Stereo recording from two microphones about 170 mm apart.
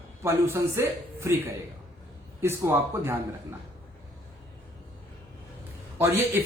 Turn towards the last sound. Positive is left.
turn(degrees=-15)  # may be behind; listen again after turning